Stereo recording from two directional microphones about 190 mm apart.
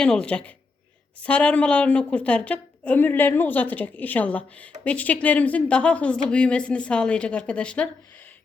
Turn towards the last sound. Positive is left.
turn(degrees=5)  # may be behind; listen again after turning